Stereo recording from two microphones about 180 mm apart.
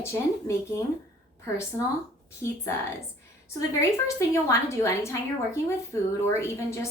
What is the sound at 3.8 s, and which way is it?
A woman's voice, 15° left (ahead or behind).